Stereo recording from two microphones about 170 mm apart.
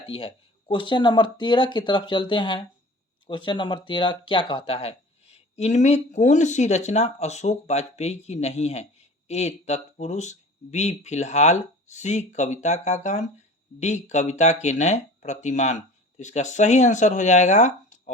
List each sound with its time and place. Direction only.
0.1 s speech: 35° left (ahead or behind)